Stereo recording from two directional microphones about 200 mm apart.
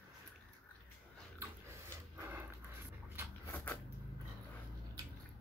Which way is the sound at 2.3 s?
10° right (ahead or behind).